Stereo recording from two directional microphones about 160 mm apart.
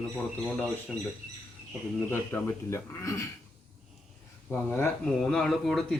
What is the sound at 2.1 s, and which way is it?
A man's voice, 15° left (ahead or behind).